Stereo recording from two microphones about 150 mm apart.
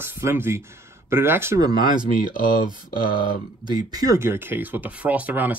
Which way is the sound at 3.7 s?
25° right (ahead or behind).